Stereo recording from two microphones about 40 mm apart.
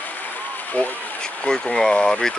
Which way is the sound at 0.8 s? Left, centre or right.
Left.